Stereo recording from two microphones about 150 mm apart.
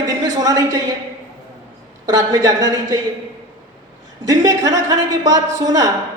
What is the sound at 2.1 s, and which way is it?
Speech, 25° right (ahead or behind).